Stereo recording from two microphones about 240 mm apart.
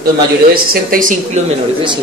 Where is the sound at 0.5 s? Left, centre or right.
Right.